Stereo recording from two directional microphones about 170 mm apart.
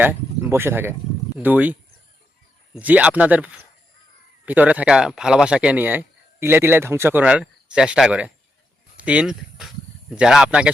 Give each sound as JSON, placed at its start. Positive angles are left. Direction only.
{"t": 0.0, "sound": "speech", "side_deg": -10}